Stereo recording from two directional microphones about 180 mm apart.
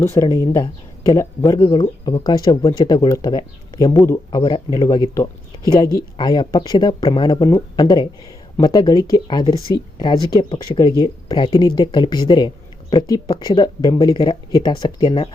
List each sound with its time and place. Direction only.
0.0 s speech: 15° left (ahead or behind)